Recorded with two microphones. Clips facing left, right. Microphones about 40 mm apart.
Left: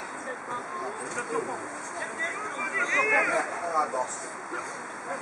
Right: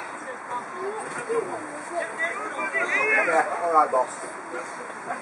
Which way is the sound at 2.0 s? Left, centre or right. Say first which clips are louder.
Right 5 dB; centre.